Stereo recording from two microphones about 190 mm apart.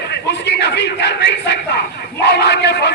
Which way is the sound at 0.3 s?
65° left (ahead or behind).